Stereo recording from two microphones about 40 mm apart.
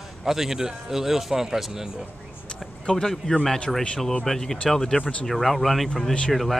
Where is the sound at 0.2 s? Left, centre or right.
Centre.